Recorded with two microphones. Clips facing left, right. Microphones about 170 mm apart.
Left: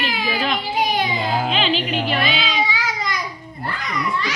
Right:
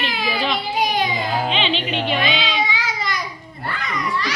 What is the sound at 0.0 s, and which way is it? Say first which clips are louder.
Baby cry: even; 5° left (ahead or behind).